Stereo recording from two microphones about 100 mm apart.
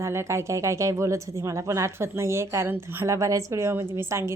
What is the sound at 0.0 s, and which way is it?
Speech, 30° right (ahead or behind).